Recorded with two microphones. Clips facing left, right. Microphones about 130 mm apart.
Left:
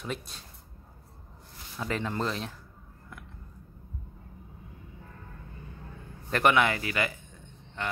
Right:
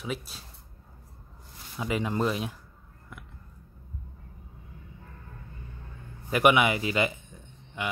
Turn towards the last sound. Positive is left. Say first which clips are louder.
# right 1 dB
turn(degrees=-10)  # may be behind; listen again after turning